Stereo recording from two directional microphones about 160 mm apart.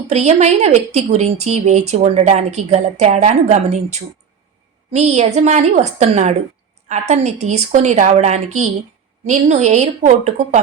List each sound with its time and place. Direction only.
0.1 s a woman's voice: 45° right (ahead or behind)